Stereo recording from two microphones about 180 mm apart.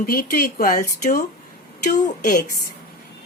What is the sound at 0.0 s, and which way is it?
Speech, 55° left (ahead or behind).